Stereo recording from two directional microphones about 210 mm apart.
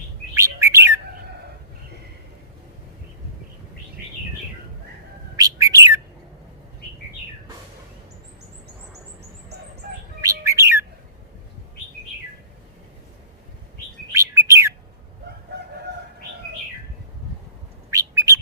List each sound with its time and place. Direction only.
0.3 s bird: 15° right (ahead or behind)
5.4 s bird: 15° right (ahead or behind)
10.2 s bird: 15° right (ahead or behind)
14.1 s chirp: 15° right (ahead or behind)
17.9 s bird: 15° right (ahead or behind)